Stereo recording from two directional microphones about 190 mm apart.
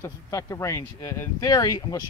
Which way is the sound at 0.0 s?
15° left (ahead or behind).